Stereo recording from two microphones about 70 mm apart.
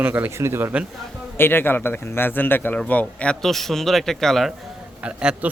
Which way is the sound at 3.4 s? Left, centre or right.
Centre.